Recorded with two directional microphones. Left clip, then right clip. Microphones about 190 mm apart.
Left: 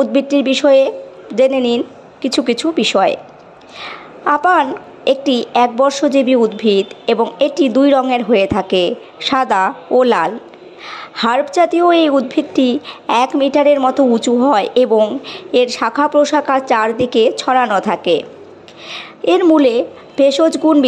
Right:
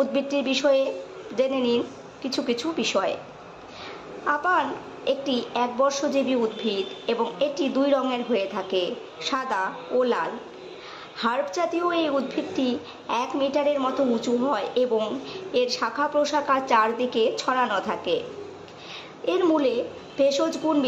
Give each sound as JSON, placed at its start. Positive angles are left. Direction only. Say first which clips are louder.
{"t": 0.0, "sound": "a woman's voice", "louder": "left 10 dB", "side_deg": 40}